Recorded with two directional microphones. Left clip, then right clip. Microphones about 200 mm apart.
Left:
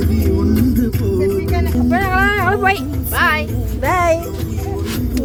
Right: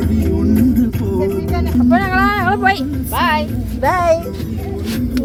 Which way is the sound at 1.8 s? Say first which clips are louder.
Right 1 dB; 5° left (ahead or behind).